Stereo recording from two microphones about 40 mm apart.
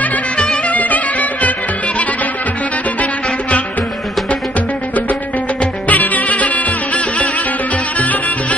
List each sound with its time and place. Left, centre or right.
0.7 s music: left
3.0 s music: left
5.9 s music: left